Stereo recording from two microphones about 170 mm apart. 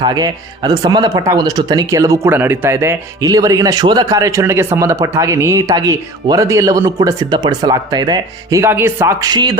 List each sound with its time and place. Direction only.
0.0 s speech: 25° right (ahead or behind)